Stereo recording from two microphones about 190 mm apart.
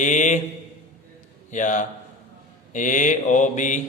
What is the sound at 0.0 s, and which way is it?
Mantra, 40° left (ahead or behind).